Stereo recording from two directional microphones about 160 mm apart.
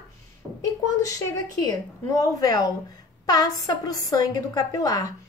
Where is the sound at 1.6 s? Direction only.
25° left (ahead or behind).